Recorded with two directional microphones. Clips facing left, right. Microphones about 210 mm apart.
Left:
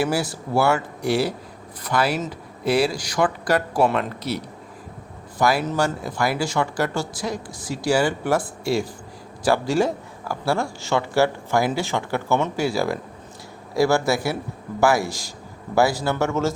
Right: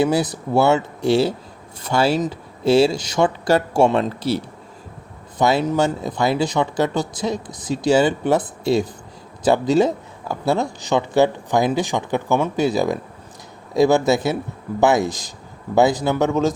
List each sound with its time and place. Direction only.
0.0 s speech: 20° right (ahead or behind)